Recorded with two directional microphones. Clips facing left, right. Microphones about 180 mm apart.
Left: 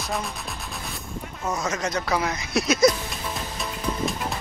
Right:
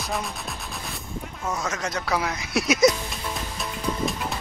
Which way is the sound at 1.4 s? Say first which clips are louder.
Left 2 dB; 5° left (ahead or behind).